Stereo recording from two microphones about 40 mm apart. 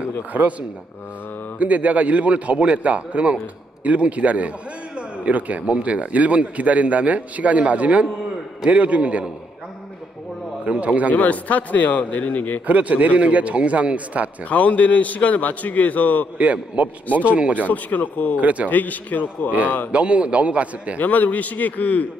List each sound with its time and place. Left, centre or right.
0.3 s speech: right
10.8 s speech: right
11.1 s a man's voice: left
12.6 s speech: right
14.5 s a man's voice: left
16.3 s speech: right
17.6 s a man's voice: left
18.4 s speech: right
18.7 s a man's voice: left
19.9 s speech: right
21.0 s a man's voice: left